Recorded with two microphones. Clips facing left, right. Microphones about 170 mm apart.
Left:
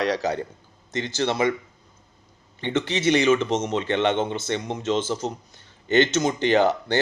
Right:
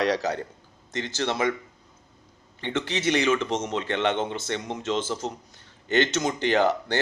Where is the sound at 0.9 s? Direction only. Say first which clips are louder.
Left 3 dB; 15° left (ahead or behind).